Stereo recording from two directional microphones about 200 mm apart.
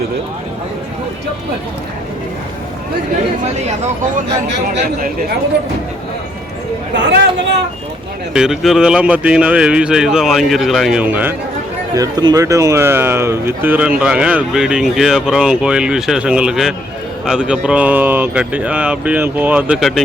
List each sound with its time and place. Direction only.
6.9 s speech: 60° right (ahead or behind)
8.3 s speech: 5° right (ahead or behind)